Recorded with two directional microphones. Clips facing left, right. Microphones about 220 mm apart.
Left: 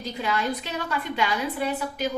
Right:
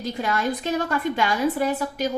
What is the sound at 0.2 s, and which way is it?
A woman's voice, 45° right (ahead or behind).